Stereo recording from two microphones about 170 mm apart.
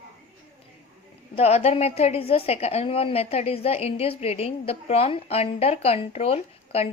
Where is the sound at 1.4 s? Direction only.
35° left (ahead or behind).